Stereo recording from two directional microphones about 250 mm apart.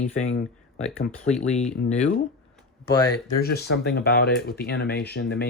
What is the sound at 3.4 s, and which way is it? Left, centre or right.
Speech, left.